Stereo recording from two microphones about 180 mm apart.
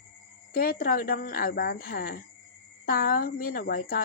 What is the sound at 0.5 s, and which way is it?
Speech, 55° left (ahead or behind).